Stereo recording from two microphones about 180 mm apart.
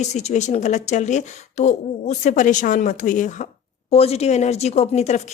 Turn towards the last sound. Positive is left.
turn(degrees=40)  # may be behind; listen again after turning